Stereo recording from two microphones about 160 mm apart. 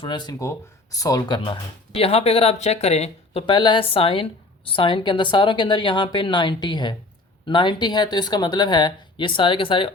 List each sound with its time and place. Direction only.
0.0 s speech: 30° left (ahead or behind)